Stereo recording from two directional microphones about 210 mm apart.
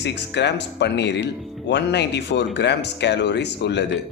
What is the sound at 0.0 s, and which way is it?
Speech, 55° left (ahead or behind).